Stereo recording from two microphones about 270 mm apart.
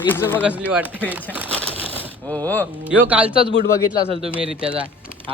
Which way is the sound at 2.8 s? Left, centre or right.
Centre.